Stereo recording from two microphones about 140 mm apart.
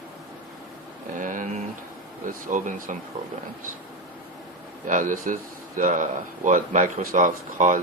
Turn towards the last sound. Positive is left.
turn(degrees=-65)  # may be behind; listen again after turning